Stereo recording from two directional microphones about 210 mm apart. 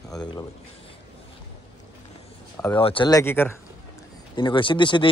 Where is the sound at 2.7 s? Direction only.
25° left (ahead or behind).